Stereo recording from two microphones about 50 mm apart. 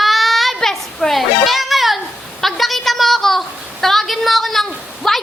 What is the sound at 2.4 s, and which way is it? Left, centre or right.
A woman's voice, centre.